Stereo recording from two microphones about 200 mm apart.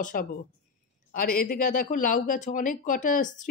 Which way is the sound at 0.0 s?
45° left (ahead or behind).